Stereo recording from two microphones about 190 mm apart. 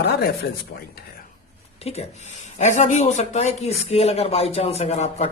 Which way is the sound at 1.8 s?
35° left (ahead or behind).